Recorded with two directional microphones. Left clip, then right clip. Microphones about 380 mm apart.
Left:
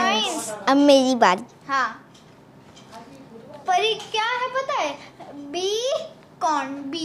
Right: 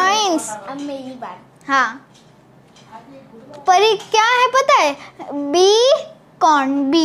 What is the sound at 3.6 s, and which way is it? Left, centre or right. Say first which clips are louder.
A child's voice: right 8 dB; right.